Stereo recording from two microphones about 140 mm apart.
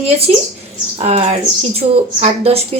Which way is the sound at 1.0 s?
45° right (ahead or behind).